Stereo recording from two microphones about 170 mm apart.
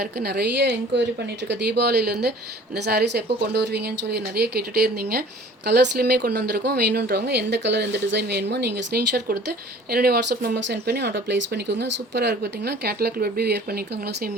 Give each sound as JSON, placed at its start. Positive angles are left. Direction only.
{"t": 0.0, "sound": "speech", "side_deg": -70}
{"t": 1.5, "sound": "a woman's voice", "side_deg": -80}
{"t": 5.6, "sound": "speech", "side_deg": -80}